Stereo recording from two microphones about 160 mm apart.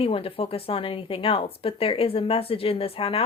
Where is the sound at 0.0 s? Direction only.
35° left (ahead or behind).